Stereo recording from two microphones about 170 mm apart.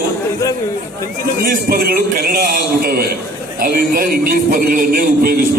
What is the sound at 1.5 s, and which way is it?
A man's voice, 60° right (ahead or behind).